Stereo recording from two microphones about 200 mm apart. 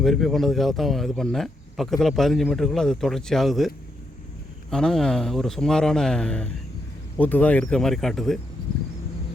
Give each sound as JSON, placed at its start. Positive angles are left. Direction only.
{"t": 0.0, "sound": "speech", "side_deg": 0}
{"t": 4.7, "sound": "speech", "side_deg": 5}